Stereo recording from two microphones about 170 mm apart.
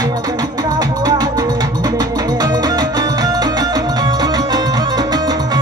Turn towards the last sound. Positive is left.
turn(degrees=-25)  # may be behind; listen again after turning